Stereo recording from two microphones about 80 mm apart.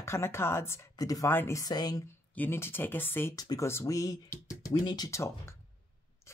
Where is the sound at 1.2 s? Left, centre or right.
Left.